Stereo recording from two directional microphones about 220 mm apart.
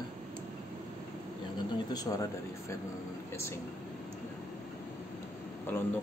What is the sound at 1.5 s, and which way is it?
Speech, 15° left (ahead or behind).